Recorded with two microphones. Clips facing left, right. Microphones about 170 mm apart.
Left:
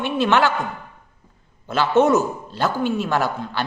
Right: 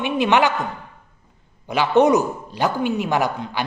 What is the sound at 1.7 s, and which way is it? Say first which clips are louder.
A man's voice: right 1 dB; 15° right (ahead or behind).